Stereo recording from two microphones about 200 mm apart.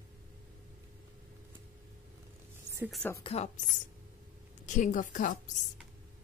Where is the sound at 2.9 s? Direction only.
10° left (ahead or behind).